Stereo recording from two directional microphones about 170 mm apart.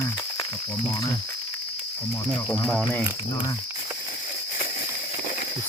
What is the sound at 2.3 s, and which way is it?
Speech, 10° left (ahead or behind).